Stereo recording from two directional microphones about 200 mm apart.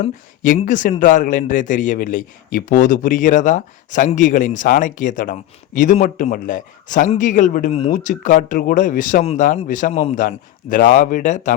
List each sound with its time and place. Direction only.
0.4 s a man's voice: 40° left (ahead or behind)
7.7 s a man's voice: 30° left (ahead or behind)